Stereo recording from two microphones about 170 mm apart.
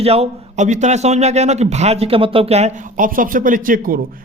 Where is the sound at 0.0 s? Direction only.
35° right (ahead or behind).